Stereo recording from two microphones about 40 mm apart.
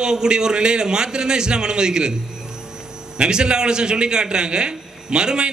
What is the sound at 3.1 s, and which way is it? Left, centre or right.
A man's voice, right.